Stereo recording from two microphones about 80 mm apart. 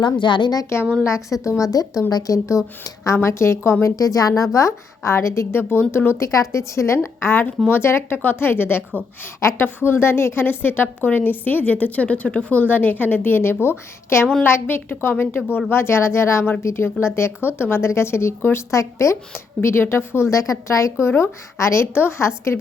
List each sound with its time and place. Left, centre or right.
0.0 s a woman's voice: left
1.0 s a woman's voice: left
3.9 s a woman's voice: left
20.9 s speech: left